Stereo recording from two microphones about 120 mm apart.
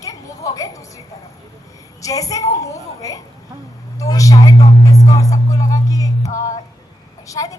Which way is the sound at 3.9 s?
30° left (ahead or behind).